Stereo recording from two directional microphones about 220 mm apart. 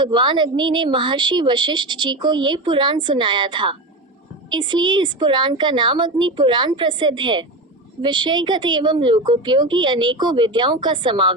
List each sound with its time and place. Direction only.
0.0 s a woman's voice: 20° right (ahead or behind)